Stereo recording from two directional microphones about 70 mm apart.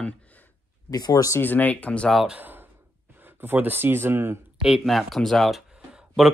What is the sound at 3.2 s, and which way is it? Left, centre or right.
Speech, right.